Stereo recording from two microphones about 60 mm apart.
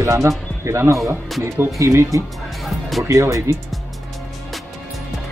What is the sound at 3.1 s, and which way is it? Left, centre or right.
Speech, right.